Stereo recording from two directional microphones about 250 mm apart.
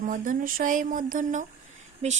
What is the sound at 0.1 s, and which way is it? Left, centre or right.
Speech, right.